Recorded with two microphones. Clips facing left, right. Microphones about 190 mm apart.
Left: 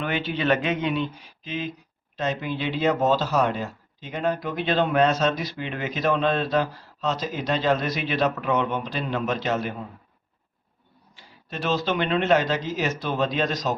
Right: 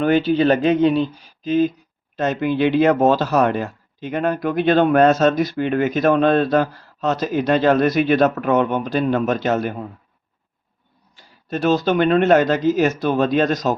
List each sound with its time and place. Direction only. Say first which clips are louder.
0.0 s speech: right 10 dB; 40° right (ahead or behind)
11.2 s speech: right 10 dB; 45° right (ahead or behind)